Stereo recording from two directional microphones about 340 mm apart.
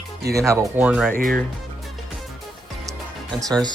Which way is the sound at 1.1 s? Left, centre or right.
Right.